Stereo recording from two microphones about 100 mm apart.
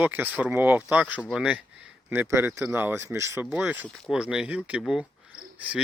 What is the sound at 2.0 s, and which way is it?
Speech, 25° right (ahead or behind).